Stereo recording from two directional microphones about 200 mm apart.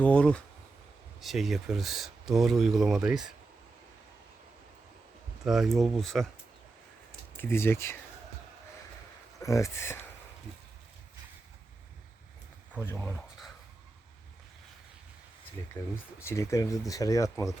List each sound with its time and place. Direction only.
0.0 s speech: 5° left (ahead or behind)
5.5 s speech: centre (ahead or behind)
7.3 s speech: 10° left (ahead or behind)
9.4 s speech: 15° left (ahead or behind)
12.7 s speech: 10° left (ahead or behind)
15.8 s speech: 10° left (ahead or behind)